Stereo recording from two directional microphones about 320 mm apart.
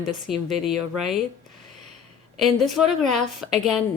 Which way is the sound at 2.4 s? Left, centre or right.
Centre.